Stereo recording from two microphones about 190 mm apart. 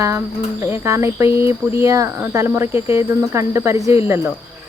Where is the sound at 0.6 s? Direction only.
15° right (ahead or behind).